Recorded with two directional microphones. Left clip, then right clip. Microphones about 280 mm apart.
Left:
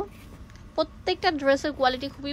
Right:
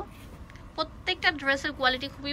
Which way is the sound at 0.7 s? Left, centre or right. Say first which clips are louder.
Left 4 dB; left.